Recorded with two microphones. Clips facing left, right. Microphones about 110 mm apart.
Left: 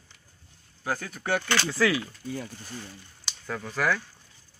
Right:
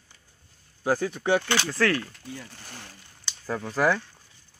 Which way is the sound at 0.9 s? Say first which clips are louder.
Right 7 dB; centre (ahead or behind).